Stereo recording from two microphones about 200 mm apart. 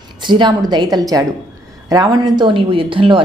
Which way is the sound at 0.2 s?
25° right (ahead or behind).